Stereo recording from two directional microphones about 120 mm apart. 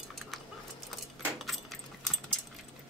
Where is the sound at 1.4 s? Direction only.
Centre (ahead or behind).